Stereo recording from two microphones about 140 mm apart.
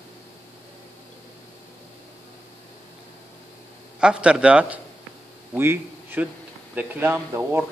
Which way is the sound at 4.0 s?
5° right (ahead or behind).